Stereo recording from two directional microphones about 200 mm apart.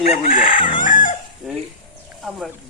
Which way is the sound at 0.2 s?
45° left (ahead or behind).